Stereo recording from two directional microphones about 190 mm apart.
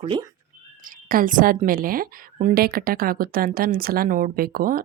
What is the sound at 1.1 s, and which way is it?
A woman's voice, 45° right (ahead or behind).